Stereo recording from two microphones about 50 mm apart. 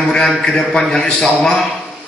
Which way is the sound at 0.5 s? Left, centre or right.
Centre.